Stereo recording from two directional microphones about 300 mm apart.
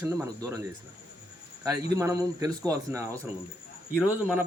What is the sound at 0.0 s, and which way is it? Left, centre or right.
Speech, centre.